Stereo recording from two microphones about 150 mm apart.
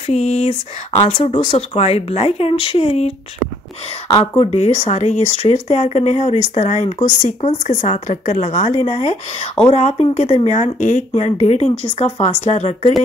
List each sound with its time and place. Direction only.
0.0 s speech: 45° left (ahead or behind)
4.4 s speech: 45° left (ahead or behind)